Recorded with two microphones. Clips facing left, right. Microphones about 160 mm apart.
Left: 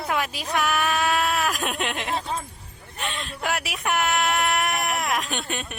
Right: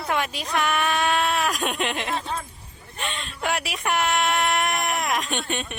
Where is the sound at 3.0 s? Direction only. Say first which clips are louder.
Even; centre (ahead or behind).